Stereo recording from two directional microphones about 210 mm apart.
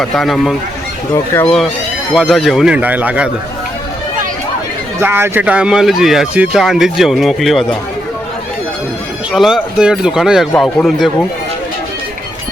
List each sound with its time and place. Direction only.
0.0 s speech: centre (ahead or behind)
4.9 s speech: 10° right (ahead or behind)
9.3 s speech: centre (ahead or behind)